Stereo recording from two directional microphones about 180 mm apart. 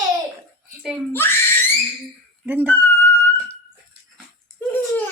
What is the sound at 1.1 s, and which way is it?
Speech, 10° left (ahead or behind).